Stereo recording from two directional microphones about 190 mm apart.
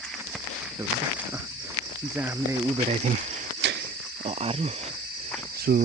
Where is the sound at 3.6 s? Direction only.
65° right (ahead or behind).